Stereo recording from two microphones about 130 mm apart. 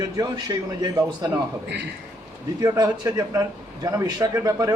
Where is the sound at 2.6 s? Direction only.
30° right (ahead or behind).